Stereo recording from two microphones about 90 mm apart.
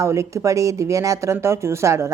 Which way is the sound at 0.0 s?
35° right (ahead or behind).